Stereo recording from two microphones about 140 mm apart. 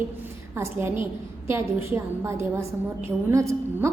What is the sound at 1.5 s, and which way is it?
A woman's voice, 20° right (ahead or behind).